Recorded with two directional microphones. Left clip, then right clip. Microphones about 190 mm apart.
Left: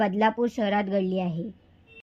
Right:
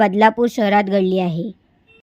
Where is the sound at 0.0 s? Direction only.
20° right (ahead or behind).